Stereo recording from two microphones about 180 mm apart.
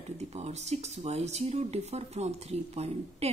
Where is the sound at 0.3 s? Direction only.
35° right (ahead or behind).